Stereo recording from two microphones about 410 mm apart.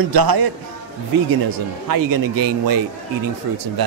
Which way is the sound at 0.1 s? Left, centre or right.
Right.